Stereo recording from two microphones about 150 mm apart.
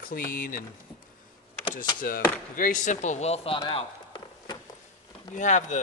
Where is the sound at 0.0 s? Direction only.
65° left (ahead or behind).